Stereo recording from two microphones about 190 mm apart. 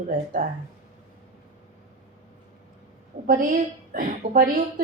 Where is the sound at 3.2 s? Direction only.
45° right (ahead or behind).